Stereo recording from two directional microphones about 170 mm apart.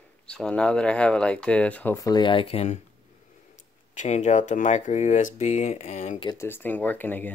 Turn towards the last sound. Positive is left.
turn(degrees=10)  # may be behind; listen again after turning